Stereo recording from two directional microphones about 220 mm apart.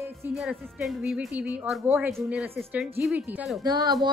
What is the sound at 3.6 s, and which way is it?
Speech, 20° right (ahead or behind).